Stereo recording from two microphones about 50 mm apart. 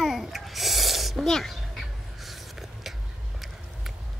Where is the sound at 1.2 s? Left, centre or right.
Centre.